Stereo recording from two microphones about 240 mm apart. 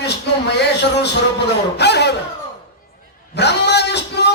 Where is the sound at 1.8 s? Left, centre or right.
Left.